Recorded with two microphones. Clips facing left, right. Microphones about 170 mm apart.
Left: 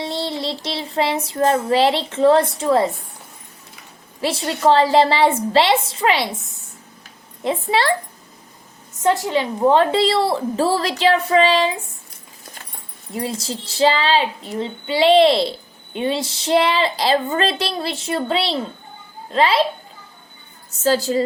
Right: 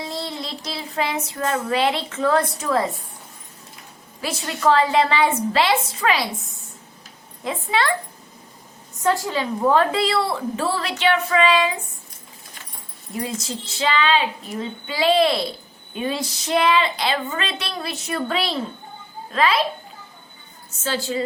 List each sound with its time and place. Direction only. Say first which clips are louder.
0.0 s child singing: left 5 dB; 30° left (ahead or behind)
4.2 s speech: left 4 dB; 30° left (ahead or behind)
7.4 s a woman's voice: left 4 dB; 30° left (ahead or behind)
9.0 s a woman's voice: left 3 dB; 20° left (ahead or behind)
13.1 s speech: left 2 dB; 30° left (ahead or behind)
20.7 s a woman's voice: left 7 dB; 40° left (ahead or behind)